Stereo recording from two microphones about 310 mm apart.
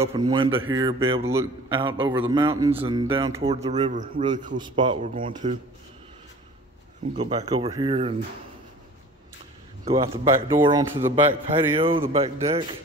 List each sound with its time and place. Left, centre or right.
0.0 s a man's voice: centre
7.2 s a man's voice: centre
9.8 s a man's voice: centre